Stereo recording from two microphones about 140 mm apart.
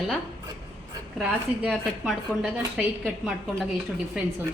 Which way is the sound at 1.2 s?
5° right (ahead or behind).